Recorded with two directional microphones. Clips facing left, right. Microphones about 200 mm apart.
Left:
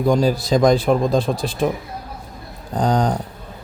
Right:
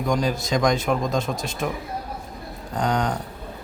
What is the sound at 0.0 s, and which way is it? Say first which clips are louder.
Speech: left 6 dB; 35° left (ahead or behind).